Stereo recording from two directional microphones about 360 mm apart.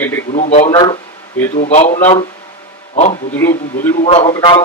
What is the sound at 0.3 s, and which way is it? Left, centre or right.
A man's voice, centre.